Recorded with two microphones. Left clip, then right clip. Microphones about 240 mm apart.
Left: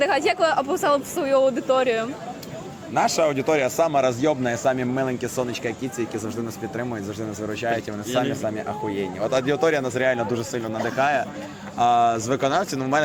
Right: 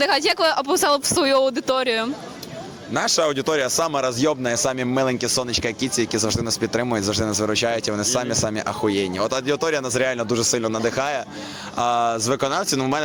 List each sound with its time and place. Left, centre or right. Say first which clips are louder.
0.0 s a man's voice: right 1 dB; right